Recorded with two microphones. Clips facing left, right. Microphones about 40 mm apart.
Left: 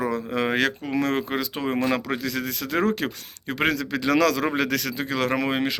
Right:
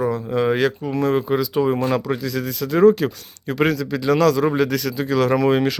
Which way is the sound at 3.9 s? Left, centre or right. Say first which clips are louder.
Right 4 dB; left.